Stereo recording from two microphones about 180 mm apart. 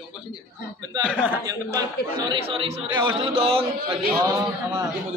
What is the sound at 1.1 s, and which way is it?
Speech, 10° right (ahead or behind).